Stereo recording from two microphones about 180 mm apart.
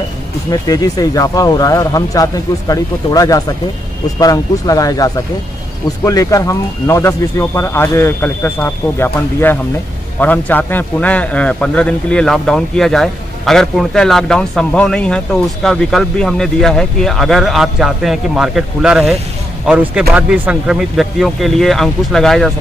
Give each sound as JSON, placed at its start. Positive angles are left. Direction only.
{"t": 0.5, "sound": "a man's voice", "side_deg": 20}